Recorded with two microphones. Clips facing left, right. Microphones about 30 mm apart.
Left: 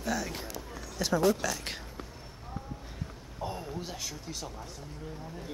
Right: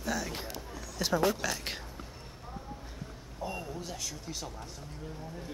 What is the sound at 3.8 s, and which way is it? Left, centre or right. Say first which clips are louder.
Speech: left 1 dB; centre.